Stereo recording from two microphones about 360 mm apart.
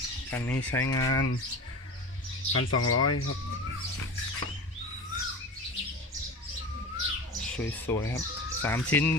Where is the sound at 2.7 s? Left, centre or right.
Left.